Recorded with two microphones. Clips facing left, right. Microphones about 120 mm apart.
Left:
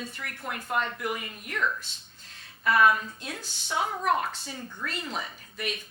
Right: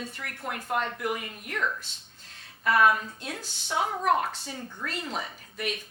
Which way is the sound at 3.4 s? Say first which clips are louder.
Right 1 dB; 65° right (ahead or behind).